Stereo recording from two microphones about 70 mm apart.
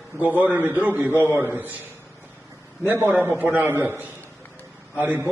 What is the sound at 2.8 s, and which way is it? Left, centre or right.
A man's voice, right.